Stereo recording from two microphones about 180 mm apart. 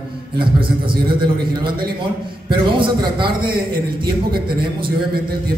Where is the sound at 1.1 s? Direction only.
25° right (ahead or behind).